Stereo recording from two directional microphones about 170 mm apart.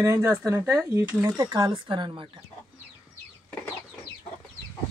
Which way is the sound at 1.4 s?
25° right (ahead or behind).